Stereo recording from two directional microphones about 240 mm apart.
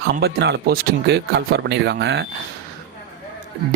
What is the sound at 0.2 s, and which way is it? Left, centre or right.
Speech, right.